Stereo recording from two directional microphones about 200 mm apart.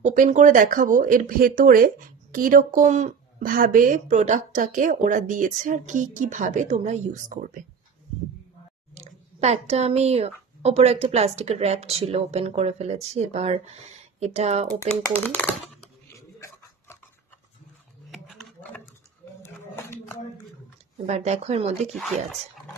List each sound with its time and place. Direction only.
0.0 s speech: 35° right (ahead or behind)
9.0 s speech: 35° right (ahead or behind)
15.2 s speech: 10° left (ahead or behind)
18.1 s a sound: centre (ahead or behind)
19.4 s a sound: 10° left (ahead or behind)
21.1 s speech: 35° right (ahead or behind)
21.9 s speech: centre (ahead or behind)